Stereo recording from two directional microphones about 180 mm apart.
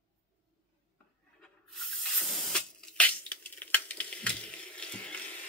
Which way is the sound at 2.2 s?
Centre (ahead or behind).